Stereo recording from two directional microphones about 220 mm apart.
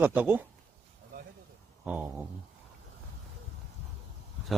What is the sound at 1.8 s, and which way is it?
Speech, 5° right (ahead or behind).